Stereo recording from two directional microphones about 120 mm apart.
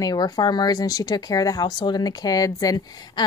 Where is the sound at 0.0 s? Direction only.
35° left (ahead or behind).